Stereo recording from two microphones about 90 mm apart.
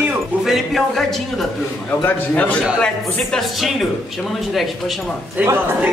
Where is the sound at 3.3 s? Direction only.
Centre (ahead or behind).